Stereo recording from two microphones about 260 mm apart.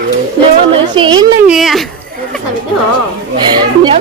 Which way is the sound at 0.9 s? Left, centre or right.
Centre.